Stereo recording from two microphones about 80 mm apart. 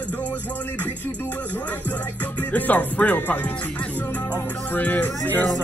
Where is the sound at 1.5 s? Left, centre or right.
Left.